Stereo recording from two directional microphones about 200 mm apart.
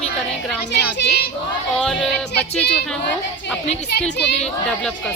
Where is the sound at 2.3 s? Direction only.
55° left (ahead or behind).